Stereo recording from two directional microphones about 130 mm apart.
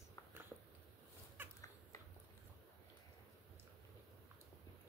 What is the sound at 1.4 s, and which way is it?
Dog, 15° right (ahead or behind).